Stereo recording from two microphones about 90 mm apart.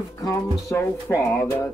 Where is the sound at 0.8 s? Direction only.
25° left (ahead or behind).